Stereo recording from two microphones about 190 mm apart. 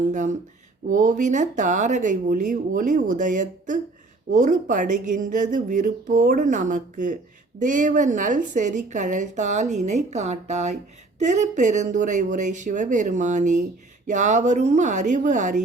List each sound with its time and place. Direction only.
0.1 s a woman's voice: 40° right (ahead or behind)